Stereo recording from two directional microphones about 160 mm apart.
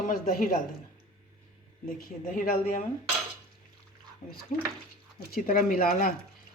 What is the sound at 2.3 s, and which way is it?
Speech, 50° left (ahead or behind).